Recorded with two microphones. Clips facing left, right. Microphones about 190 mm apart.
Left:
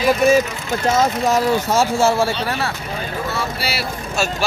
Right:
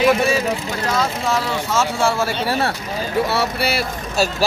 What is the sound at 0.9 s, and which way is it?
Speech, 45° left (ahead or behind).